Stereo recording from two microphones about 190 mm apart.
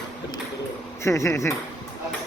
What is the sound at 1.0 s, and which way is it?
Speech, 15° left (ahead or behind).